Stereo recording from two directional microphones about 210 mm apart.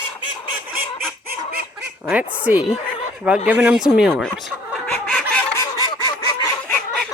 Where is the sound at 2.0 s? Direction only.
5° right (ahead or behind).